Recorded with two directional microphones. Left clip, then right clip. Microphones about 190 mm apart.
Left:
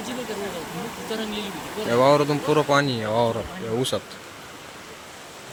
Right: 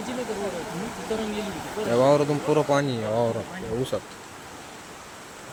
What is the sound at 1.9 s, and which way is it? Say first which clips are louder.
Speech: left 2 dB; centre (ahead or behind).